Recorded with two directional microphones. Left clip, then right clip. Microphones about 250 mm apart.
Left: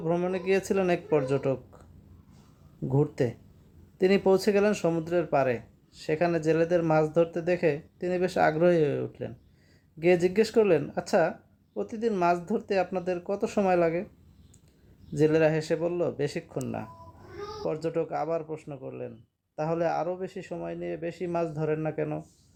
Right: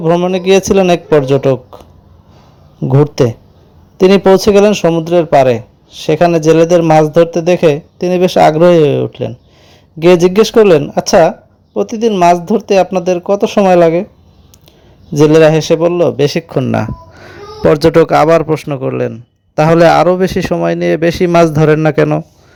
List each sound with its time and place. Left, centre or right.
0.0 s a man's voice: right
4.0 s a man's voice: right
10.3 s speech: right
12.1 s speech: right
15.2 s speech: right